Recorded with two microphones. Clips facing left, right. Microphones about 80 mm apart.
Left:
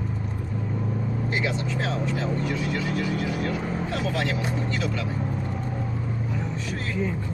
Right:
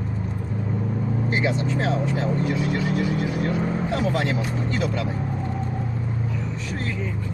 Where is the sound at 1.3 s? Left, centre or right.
Right.